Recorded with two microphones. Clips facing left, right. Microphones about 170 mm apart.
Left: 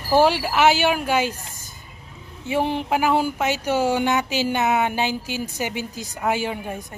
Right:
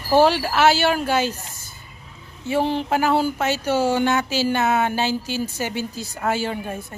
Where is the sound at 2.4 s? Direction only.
15° left (ahead or behind).